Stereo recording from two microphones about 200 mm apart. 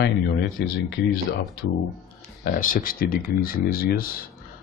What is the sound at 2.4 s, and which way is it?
Speech, 45° left (ahead or behind).